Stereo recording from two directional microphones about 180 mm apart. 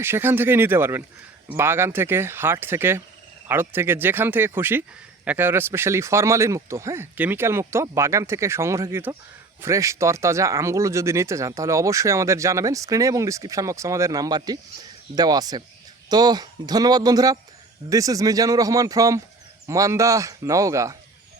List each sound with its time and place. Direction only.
0.0 s speech: 10° right (ahead or behind)